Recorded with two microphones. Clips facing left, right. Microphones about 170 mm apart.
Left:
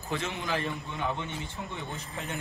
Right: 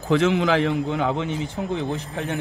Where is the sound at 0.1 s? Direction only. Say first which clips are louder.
Right 14 dB; 90° right.